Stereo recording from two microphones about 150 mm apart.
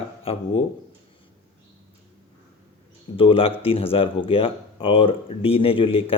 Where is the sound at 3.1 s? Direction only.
40° left (ahead or behind).